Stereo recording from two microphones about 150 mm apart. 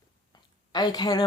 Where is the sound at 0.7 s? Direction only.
25° left (ahead or behind).